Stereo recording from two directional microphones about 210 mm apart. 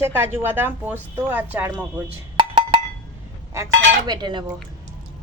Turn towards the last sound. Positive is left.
turn(degrees=-20)  # may be behind; listen again after turning